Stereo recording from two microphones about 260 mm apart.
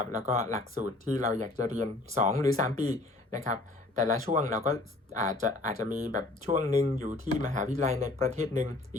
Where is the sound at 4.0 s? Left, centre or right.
Right.